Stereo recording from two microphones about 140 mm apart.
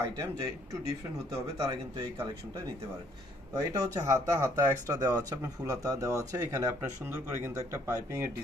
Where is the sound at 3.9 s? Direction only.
25° right (ahead or behind).